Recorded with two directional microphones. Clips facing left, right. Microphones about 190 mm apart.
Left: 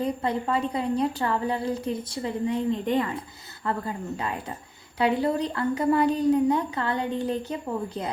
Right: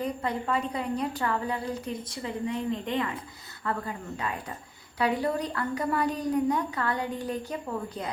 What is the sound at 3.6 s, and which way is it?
A woman's voice, 30° left (ahead or behind).